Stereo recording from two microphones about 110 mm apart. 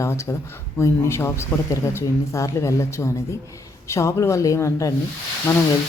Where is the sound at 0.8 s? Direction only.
25° left (ahead or behind).